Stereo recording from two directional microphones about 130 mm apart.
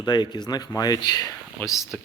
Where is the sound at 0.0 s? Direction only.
35° left (ahead or behind).